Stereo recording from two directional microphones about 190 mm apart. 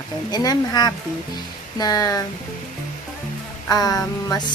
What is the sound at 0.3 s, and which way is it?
Music, 20° left (ahead or behind).